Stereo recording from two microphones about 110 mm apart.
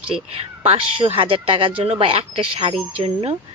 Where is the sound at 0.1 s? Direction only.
65° right (ahead or behind).